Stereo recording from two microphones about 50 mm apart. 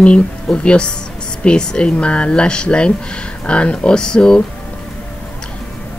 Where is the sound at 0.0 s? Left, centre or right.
Left.